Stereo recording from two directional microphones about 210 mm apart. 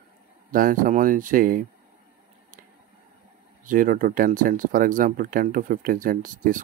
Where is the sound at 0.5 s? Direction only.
40° right (ahead or behind).